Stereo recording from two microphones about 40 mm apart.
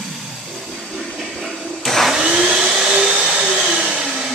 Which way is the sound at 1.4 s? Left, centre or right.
Centre.